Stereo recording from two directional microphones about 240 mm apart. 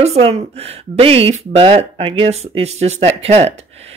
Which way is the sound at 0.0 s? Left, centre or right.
Right.